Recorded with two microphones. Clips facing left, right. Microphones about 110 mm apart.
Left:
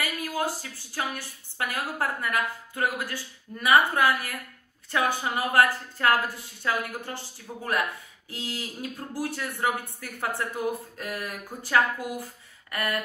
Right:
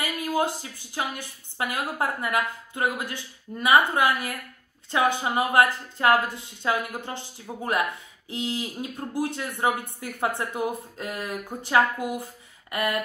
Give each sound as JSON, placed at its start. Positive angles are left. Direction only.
{"t": 0.0, "sound": "a woman's voice", "side_deg": -20}